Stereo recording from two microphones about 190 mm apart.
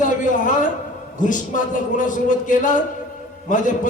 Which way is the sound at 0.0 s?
40° left (ahead or behind).